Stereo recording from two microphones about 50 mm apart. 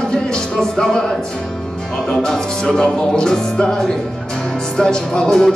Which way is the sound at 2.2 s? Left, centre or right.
Centre.